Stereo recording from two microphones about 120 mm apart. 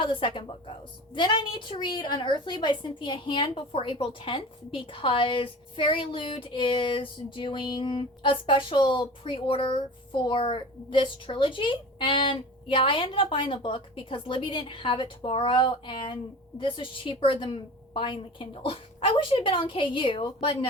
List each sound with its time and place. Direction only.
0.0 s a woman's voice: 45° left (ahead or behind)